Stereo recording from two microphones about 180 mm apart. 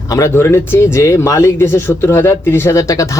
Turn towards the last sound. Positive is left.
turn(degrees=15)  # may be behind; listen again after turning